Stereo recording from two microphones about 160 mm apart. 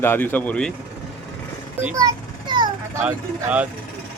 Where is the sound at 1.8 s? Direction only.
10° right (ahead or behind).